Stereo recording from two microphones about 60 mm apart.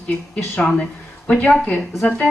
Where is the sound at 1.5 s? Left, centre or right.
Centre.